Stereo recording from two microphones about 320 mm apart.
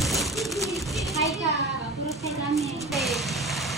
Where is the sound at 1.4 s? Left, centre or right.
Centre.